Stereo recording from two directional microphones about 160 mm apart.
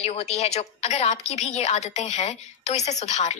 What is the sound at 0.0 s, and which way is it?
A woman's voice, 45° left (ahead or behind).